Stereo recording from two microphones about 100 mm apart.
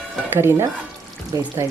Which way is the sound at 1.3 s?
35° right (ahead or behind).